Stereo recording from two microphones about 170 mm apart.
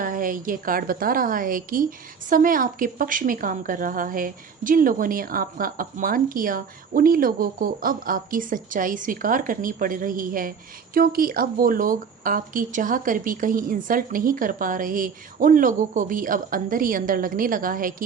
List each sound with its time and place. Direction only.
0.0 s speech: 55° right (ahead or behind)